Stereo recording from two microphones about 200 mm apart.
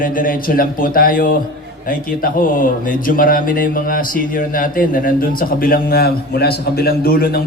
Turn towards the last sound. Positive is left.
turn(degrees=50)  # may be behind; listen again after turning